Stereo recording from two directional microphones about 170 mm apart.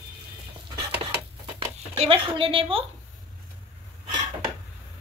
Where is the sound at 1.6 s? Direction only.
35° right (ahead or behind).